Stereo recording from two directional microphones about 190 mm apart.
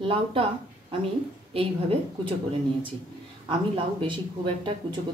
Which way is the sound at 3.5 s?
25° right (ahead or behind).